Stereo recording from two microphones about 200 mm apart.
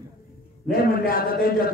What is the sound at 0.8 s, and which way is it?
Speech, 50° left (ahead or behind).